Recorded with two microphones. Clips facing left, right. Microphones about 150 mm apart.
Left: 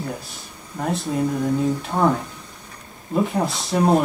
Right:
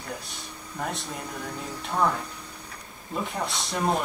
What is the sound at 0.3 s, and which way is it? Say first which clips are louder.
Speech: left 2 dB; centre (ahead or behind).